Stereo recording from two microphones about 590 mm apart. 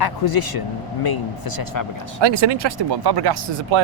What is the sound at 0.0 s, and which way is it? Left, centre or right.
Speech, left.